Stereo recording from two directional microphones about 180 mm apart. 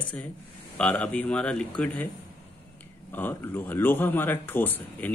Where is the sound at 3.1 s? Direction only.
10° left (ahead or behind).